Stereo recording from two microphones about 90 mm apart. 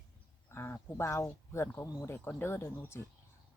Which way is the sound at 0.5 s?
25° left (ahead or behind).